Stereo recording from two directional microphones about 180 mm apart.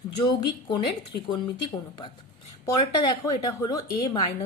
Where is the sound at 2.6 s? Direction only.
25° left (ahead or behind).